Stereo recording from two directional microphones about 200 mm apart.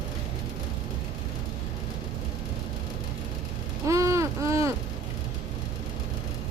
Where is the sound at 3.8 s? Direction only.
15° right (ahead or behind).